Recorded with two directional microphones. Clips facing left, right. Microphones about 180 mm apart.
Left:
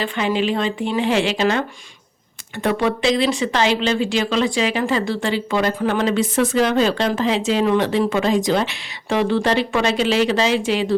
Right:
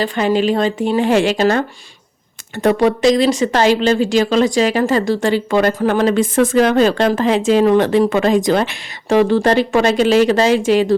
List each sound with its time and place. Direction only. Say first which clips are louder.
0.0 s a woman's voice: right 5 dB; 40° right (ahead or behind)